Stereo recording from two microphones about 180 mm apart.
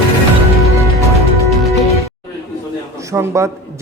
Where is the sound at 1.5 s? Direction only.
Centre (ahead or behind).